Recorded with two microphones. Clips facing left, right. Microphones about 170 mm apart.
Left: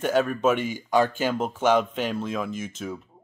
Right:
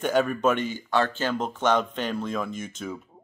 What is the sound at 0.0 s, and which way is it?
Speech, centre (ahead or behind).